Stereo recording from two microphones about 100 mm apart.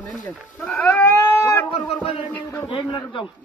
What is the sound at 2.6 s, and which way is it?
Speech, 50° left (ahead or behind).